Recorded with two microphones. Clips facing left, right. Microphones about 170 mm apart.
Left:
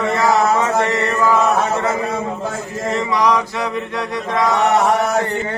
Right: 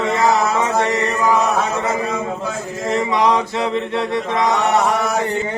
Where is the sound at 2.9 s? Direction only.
20° right (ahead or behind).